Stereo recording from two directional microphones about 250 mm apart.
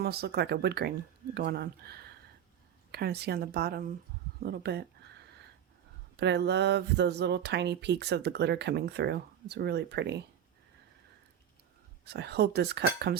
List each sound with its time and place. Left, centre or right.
0.0 s speech: right
6.1 s speech: right
12.0 s speech: right